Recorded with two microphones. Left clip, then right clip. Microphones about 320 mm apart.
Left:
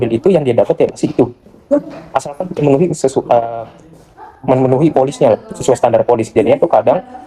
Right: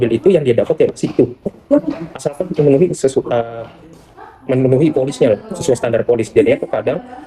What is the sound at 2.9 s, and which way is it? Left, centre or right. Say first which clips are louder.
Speech: left 3 dB; centre.